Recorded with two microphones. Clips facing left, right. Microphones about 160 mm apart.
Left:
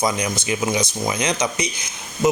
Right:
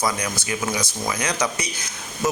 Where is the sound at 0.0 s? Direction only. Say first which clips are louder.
Left 3 dB; 20° left (ahead or behind).